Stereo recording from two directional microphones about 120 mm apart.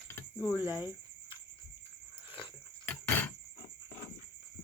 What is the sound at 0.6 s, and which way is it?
Cricket, 20° right (ahead or behind).